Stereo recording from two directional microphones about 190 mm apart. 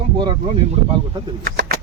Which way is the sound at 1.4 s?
55° right (ahead or behind).